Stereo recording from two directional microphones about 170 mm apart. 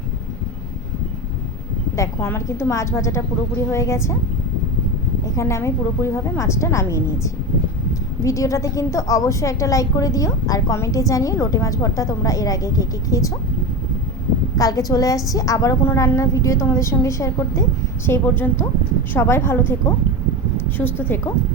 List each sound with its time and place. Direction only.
2.0 s a woman's voice: 15° left (ahead or behind)
5.4 s a woman's voice: 15° left (ahead or behind)
14.5 s a woman's voice: 20° left (ahead or behind)